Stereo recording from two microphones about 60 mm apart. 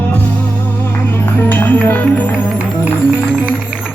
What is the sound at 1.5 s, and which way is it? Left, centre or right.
Music, left.